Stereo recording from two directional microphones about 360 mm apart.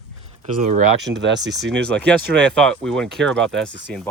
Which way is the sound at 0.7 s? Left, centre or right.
Right.